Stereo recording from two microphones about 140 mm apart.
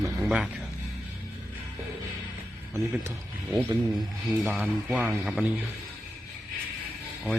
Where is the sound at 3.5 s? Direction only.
30° right (ahead or behind).